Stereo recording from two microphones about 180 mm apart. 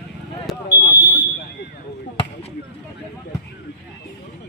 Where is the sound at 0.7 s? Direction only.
65° left (ahead or behind).